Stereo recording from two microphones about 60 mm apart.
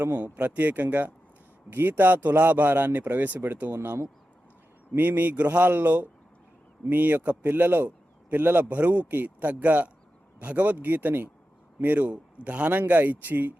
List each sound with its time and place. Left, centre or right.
0.0 s a man's voice: right
4.9 s a man's voice: right